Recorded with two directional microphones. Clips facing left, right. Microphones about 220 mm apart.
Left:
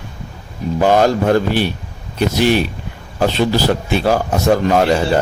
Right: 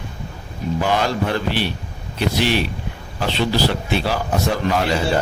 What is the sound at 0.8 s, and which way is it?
A man's voice, 45° left (ahead or behind).